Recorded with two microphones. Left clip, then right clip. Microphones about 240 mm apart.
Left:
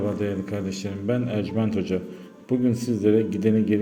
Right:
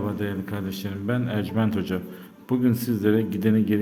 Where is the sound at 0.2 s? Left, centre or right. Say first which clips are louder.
Left 3 dB; centre.